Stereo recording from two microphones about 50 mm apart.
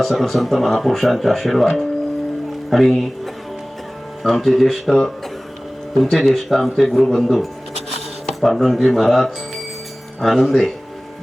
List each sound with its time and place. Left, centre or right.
0.0 s speech: centre
4.2 s speech: centre
8.4 s speech: centre